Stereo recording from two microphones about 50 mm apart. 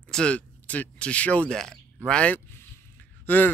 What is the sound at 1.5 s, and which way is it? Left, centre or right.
Speech, centre.